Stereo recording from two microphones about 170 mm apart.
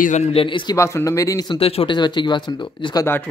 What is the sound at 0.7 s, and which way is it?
Speech, 15° left (ahead or behind).